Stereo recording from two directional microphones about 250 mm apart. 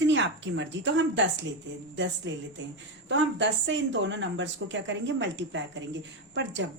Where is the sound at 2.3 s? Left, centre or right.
Right.